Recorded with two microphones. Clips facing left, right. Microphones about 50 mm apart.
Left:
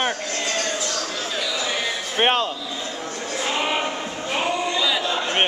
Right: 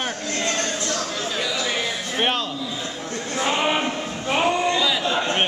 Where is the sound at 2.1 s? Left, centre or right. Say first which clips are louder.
Left 4 dB; left.